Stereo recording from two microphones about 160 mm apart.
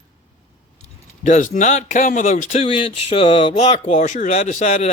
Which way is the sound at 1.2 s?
55° left (ahead or behind).